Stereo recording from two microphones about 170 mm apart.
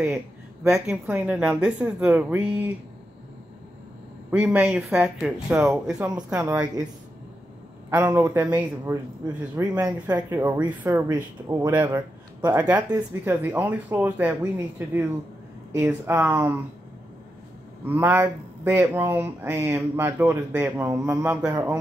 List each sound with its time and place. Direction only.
0.7 s speech: 5° right (ahead or behind)
4.3 s speech: 10° right (ahead or behind)
7.9 s speech: 15° right (ahead or behind)
15.7 s speech: 10° right (ahead or behind)
17.8 s a man's voice: 10° right (ahead or behind)